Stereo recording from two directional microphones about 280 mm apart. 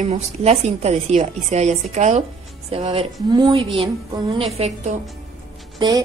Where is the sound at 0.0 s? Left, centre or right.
Right.